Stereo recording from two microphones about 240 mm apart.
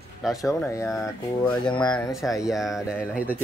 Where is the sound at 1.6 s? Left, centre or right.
Centre.